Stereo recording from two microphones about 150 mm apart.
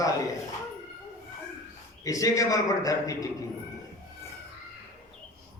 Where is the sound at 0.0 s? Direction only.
20° left (ahead or behind).